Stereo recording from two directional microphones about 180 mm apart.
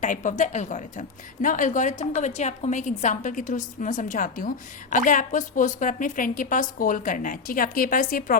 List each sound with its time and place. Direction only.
0.0 s a woman's voice: 45° left (ahead or behind)